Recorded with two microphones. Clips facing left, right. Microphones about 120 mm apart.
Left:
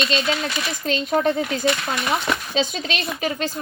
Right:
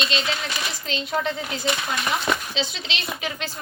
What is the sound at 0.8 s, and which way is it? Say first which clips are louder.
Speech: left 7 dB; 45° left (ahead or behind).